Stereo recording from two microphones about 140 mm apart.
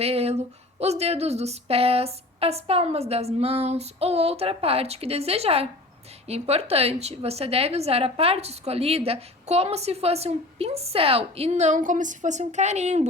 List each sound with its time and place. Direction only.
0.0 s a woman's voice: 45° right (ahead or behind)